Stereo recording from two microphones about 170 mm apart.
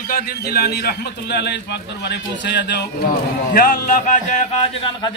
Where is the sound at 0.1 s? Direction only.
65° left (ahead or behind); by 2.8 s 85° left.